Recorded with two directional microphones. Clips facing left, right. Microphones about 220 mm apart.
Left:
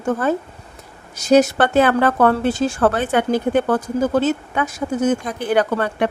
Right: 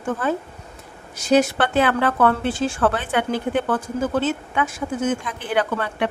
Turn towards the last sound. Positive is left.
turn(degrees=45)  # may be behind; listen again after turning